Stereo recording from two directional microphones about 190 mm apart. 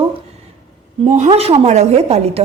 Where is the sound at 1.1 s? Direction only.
35° right (ahead or behind).